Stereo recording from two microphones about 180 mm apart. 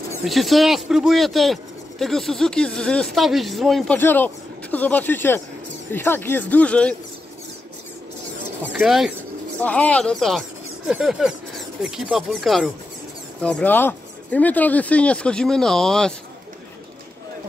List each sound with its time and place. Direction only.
0.2 s speech: centre (ahead or behind)
8.6 s speech: centre (ahead or behind)